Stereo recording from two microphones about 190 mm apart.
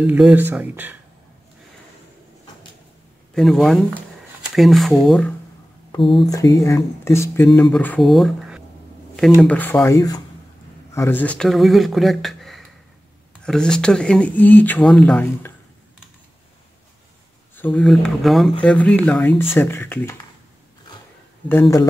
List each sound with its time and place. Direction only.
0.0 s speech: 10° right (ahead or behind)
3.3 s speech: centre (ahead or behind)
5.9 s speech: 25° left (ahead or behind); by 8.6 s centre (ahead or behind)
9.4 s speech: 10° left (ahead or behind)
17.6 s speech: 5° left (ahead or behind)
21.5 s speech: 15° left (ahead or behind)